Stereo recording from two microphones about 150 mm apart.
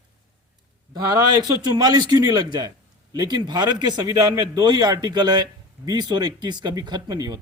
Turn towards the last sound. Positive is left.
turn(degrees=-25)  # may be behind; listen again after turning